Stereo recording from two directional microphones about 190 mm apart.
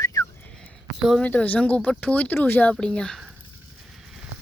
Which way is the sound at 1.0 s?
5° left (ahead or behind).